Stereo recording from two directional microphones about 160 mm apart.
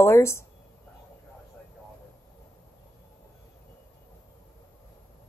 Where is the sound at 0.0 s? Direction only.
15° left (ahead or behind).